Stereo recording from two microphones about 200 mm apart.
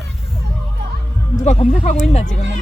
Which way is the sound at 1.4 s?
35° left (ahead or behind).